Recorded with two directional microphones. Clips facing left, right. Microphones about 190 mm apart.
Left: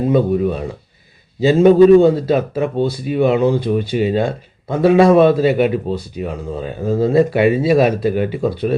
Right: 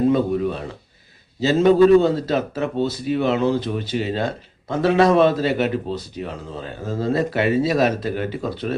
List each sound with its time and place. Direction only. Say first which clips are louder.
1.4 s a man's voice: left 5 dB; 10° left (ahead or behind)